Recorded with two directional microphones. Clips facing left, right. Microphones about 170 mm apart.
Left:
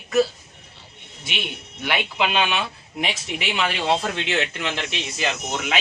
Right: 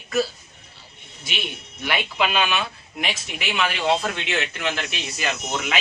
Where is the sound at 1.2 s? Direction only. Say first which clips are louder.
Left 1 dB; 20° left (ahead or behind).